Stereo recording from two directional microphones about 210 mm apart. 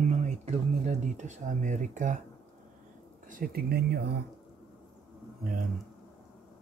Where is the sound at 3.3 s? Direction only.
45° right (ahead or behind).